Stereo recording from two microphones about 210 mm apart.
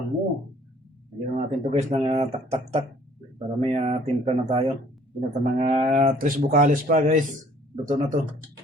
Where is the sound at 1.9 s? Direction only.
25° right (ahead or behind).